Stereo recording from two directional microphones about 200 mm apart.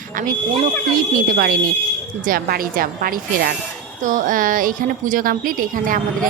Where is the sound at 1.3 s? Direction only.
45° right (ahead or behind).